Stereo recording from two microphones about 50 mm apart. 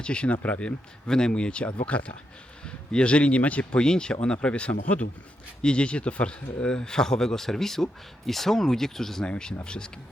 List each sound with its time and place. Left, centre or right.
0.0 s speech: left
1.0 s speech: centre